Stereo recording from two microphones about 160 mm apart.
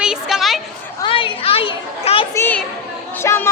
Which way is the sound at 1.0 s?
30° left (ahead or behind).